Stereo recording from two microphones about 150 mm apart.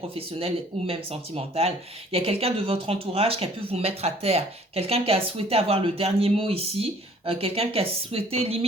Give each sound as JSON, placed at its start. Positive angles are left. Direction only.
{"t": 0.1, "sound": "speech", "side_deg": -40}